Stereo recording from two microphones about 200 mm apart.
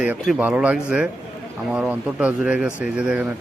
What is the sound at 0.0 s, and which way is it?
Speech, 5° right (ahead or behind).